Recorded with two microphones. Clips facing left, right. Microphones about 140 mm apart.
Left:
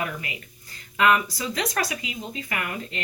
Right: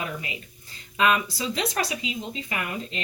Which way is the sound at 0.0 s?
20° right (ahead or behind).